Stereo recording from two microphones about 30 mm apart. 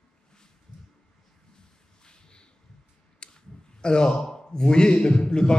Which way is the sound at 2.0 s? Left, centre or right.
Left.